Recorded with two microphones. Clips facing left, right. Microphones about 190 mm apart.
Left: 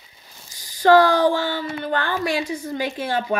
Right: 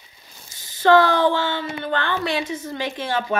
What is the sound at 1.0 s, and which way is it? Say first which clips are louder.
Speech: left 1 dB; 40° left (ahead or behind).